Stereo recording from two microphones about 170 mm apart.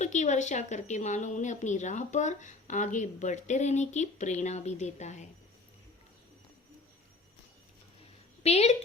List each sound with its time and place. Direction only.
0.0 s a woman's voice: 45° left (ahead or behind)
8.4 s a woman's voice: 40° left (ahead or behind)